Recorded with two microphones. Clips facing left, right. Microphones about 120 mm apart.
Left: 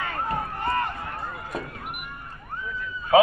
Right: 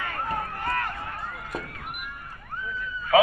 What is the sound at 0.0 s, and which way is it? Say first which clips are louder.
Run: left 2 dB; 20° left (ahead or behind).